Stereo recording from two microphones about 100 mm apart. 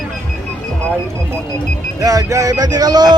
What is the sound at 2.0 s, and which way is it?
Speech, 35° right (ahead or behind).